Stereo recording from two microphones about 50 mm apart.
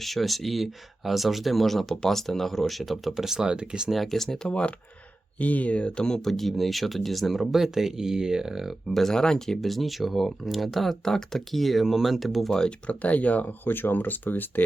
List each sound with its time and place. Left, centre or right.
0.0 s speech: centre
3.9 s speech: centre
4.4 s speech: centre
5.4 s speech: left; by 8.7 s centre
8.9 s speech: centre
12.5 s speech: centre
12.9 s speech: left
13.7 s speech: left